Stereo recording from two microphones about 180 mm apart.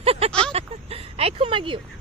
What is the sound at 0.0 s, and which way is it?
Vehicle, 35° right (ahead or behind).